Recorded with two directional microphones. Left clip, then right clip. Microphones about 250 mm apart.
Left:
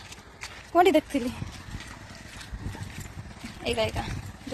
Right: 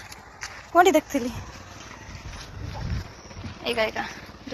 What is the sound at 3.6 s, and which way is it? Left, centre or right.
Speech, centre.